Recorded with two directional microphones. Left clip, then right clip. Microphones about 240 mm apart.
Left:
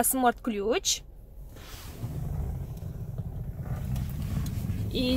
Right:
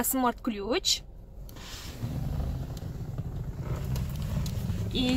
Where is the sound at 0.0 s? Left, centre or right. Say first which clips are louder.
Left 3 dB; left.